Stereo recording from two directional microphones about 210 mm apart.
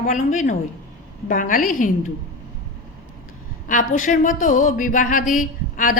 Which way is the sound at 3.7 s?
40° left (ahead or behind).